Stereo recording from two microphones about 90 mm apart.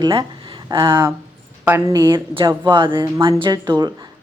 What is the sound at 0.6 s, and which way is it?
Speech, 40° right (ahead or behind).